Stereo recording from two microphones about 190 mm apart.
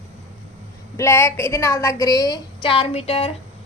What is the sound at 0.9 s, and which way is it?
A woman's voice, 15° left (ahead or behind).